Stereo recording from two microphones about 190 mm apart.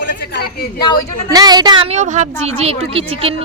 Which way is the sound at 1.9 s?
40° right (ahead or behind).